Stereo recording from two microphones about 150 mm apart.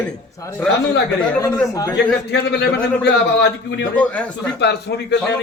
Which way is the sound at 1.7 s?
20° left (ahead or behind).